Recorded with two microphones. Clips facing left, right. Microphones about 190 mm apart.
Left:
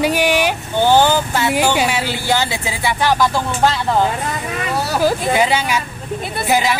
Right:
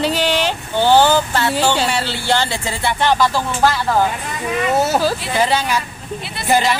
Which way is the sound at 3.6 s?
20° left (ahead or behind).